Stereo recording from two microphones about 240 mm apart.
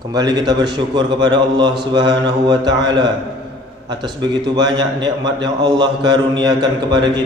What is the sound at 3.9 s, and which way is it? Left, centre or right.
A man's voice, centre.